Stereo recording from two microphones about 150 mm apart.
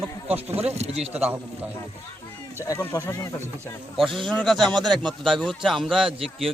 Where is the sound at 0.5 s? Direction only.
45° right (ahead or behind).